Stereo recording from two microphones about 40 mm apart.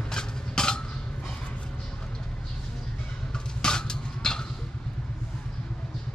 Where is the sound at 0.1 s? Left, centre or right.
Centre.